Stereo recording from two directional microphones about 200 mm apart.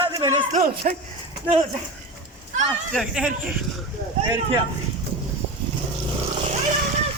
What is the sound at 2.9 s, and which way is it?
Speech, centre (ahead or behind).